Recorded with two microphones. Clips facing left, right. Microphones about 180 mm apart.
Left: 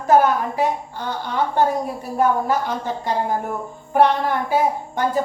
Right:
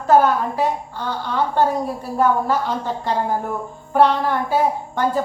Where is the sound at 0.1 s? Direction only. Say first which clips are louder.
Right 1 dB; 15° left (ahead or behind).